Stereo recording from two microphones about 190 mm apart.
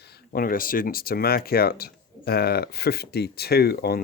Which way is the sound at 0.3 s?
50° left (ahead or behind).